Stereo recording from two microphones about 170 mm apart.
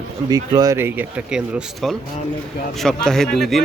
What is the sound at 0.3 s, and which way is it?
Speech, 20° right (ahead or behind).